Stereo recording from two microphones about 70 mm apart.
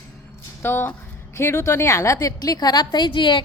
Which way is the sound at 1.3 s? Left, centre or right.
Left.